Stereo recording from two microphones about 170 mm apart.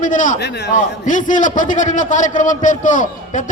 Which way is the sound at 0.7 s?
50° left (ahead or behind).